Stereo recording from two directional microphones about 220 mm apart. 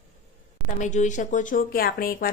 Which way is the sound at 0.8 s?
35° left (ahead or behind).